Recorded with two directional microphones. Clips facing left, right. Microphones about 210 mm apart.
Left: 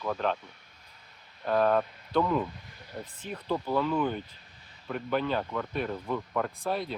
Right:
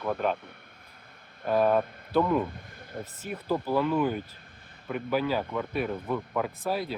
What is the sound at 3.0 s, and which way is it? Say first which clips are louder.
Speech: right 2 dB; 5° right (ahead or behind).